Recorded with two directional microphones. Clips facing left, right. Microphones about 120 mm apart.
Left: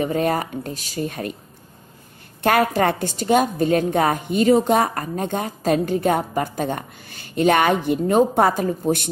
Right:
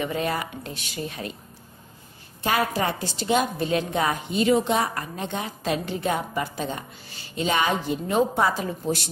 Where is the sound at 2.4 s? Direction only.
55° left (ahead or behind).